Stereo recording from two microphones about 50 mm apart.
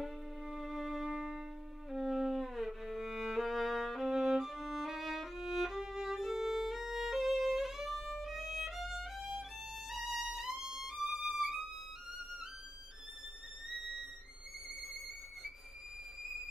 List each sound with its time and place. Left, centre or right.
0.0 s music: centre
8.2 s violin: centre